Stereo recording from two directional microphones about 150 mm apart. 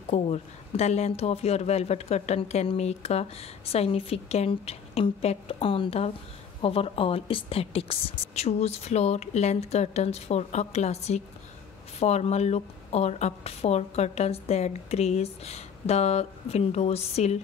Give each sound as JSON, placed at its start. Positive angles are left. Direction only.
{"t": 0.1, "sound": "speech", "side_deg": 45}